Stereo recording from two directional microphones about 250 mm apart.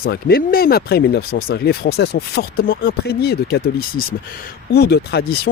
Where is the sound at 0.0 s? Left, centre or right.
Left.